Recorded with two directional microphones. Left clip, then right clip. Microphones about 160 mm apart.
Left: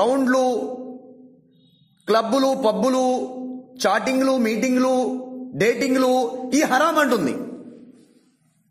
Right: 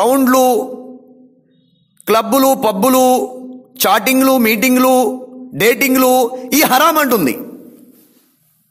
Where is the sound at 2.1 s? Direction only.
35° right (ahead or behind).